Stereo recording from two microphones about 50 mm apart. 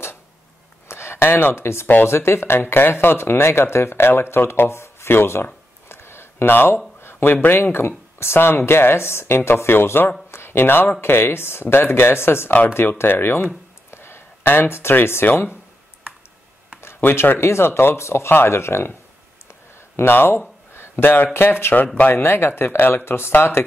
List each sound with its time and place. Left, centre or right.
0.8 s speech: left
4.5 s a sound: left
7.4 s speech: left
10.3 s a sound: left
11.0 s speech: left
13.8 s a sound: left
16.8 s speech: left
18.0 s speech: left
18.3 s speech: left
20.0 s a sound: left
21.0 s speech: left
21.8 s speech: left
22.1 s speech: left